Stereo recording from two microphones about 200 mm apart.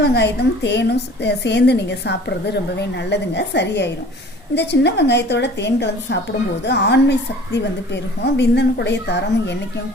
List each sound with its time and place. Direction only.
0.0 s a woman's voice: 60° left (ahead or behind)